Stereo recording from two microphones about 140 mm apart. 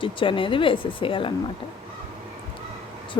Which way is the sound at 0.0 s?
35° left (ahead or behind).